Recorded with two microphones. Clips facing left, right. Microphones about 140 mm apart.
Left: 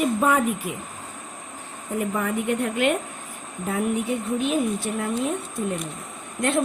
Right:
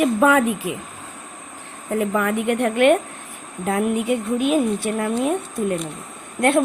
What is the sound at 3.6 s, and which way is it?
A woman's voice, 85° right.